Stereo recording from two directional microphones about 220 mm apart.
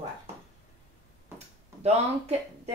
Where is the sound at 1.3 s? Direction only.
30° right (ahead or behind).